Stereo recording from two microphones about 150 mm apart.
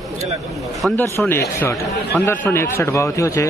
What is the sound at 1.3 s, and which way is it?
A man's voice, 15° left (ahead or behind).